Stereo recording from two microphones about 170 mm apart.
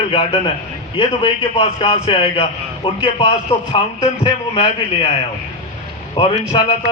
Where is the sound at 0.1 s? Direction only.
30° left (ahead or behind).